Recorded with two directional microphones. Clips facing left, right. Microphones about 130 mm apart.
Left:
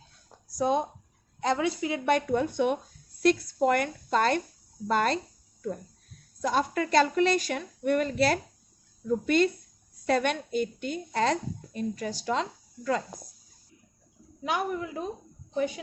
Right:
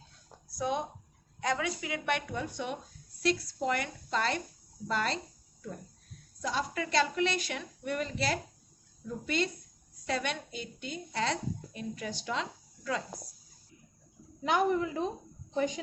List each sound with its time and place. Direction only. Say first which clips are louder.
0.6 s a woman's voice: left 6 dB; 35° left (ahead or behind)
2.3 s a woman's voice: left 10 dB; 55° left (ahead or behind)
6.4 s a woman's voice: left 7 dB; 50° left (ahead or behind)
14.4 s a woman's voice: right 2 dB; 10° left (ahead or behind)